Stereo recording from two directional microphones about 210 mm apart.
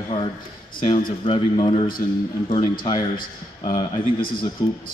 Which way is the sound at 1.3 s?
25° left (ahead or behind).